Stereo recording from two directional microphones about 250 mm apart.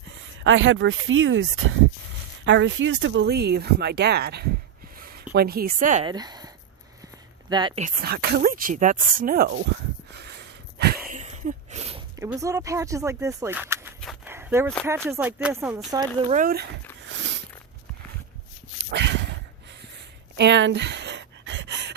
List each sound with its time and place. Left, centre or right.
0.2 s speech: right
6.1 s speech: centre
7.5 s speech: centre
7.9 s speech: right
10.2 s a sound: right
12.2 s speech: centre
14.3 s a sound: centre
15.1 s speech: centre
16.3 s speech: right
17.0 s a sound: right
18.9 s dog: right
20.3 s a sound: right